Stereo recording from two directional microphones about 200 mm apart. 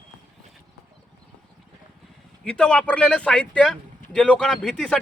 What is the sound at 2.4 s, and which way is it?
A man's voice, 5° left (ahead or behind).